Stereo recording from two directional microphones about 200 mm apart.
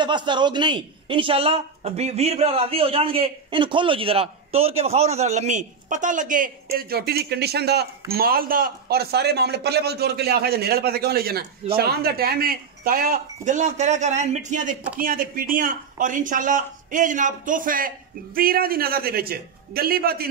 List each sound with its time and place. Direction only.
0.0 s a man's voice: 20° right (ahead or behind); by 20.2 s 50° right (ahead or behind)